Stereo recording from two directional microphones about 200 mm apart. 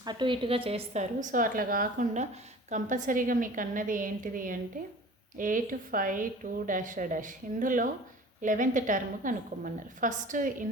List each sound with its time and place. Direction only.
0.0 s a woman's voice: 20° right (ahead or behind); by 10.5 s 40° right (ahead or behind)